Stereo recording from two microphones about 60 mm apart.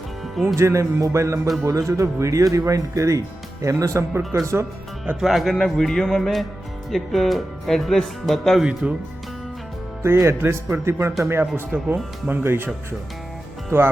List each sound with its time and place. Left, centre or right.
0.4 s speech: right
4.3 s speech: right
5.2 s speech: centre
5.5 s music: centre
6.9 s speech: centre
8.8 s speech: centre
10.0 s speech: right